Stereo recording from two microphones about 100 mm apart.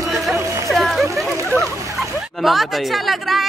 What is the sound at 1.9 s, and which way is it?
Speech, centre (ahead or behind).